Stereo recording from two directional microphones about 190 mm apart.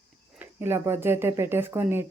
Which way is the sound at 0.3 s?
10° right (ahead or behind).